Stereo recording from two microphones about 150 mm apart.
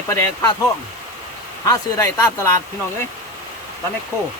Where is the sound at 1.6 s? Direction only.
20° left (ahead or behind).